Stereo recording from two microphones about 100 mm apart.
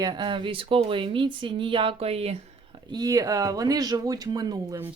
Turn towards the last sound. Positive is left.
turn(degrees=-40)  # may be behind; listen again after turning